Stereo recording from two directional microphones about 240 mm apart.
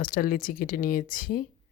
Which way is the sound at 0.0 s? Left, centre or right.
Left.